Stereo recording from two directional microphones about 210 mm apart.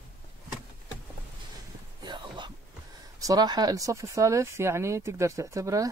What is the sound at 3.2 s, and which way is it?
Speech, 20° right (ahead or behind).